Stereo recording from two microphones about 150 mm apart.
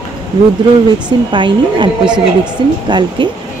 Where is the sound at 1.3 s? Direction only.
30° right (ahead or behind).